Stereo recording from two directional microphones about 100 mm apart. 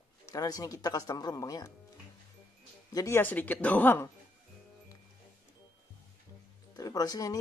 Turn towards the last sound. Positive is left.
turn(degrees=40)  # may be behind; listen again after turning